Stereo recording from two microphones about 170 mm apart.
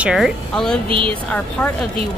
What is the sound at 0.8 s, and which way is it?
Speech, 30° right (ahead or behind).